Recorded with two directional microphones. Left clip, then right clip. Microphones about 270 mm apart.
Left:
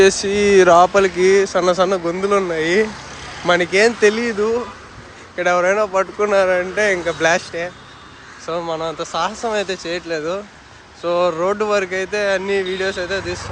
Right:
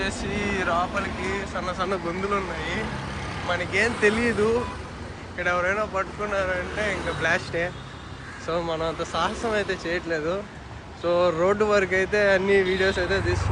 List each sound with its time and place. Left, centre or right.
0.0 s speech: left